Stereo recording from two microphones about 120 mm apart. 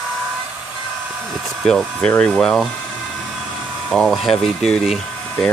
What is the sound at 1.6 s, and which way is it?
Speech, 10° left (ahead or behind).